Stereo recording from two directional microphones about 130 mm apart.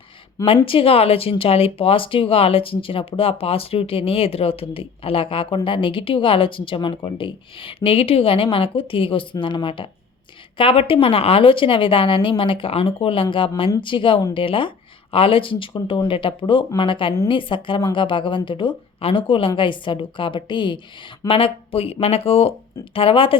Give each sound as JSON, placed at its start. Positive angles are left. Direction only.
{"t": 0.4, "sound": "speech", "side_deg": 45}